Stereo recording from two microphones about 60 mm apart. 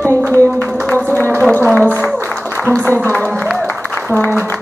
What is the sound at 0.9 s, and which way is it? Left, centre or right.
Music, left.